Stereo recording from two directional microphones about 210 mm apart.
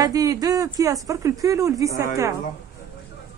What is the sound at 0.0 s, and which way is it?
A woman's voice, 15° right (ahead or behind).